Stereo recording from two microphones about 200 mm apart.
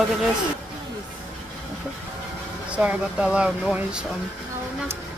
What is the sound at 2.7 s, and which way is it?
Speech, 5° right (ahead or behind).